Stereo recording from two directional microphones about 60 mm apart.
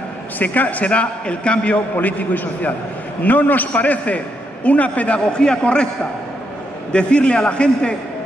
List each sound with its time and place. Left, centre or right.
0.4 s a man's voice: left
6.9 s a man's voice: centre